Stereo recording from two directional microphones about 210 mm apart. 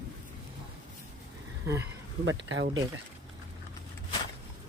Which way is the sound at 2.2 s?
60° right (ahead or behind).